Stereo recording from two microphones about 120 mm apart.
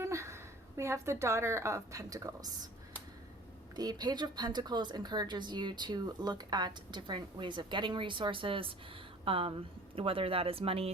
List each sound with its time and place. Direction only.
0.0 s a woman's voice: 25° right (ahead or behind)
3.8 s speech: 35° right (ahead or behind); by 10.9 s 55° right (ahead or behind)